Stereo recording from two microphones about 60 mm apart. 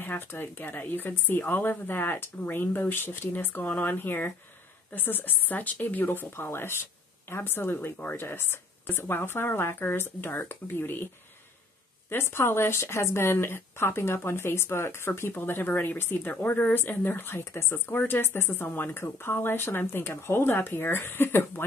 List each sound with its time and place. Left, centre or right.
0.0 s speech: left
12.1 s speech: left